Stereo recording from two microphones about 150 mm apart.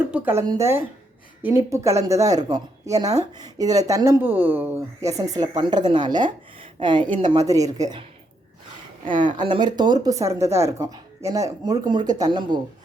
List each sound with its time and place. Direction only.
0.1 s a sound: 15° right (ahead or behind)
0.4 s speech: 20° right (ahead or behind)
9.1 s speech: 60° right (ahead or behind)
9.4 s speech: 30° right (ahead or behind)